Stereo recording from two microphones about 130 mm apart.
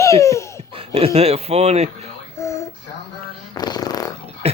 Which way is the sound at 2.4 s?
25° left (ahead or behind).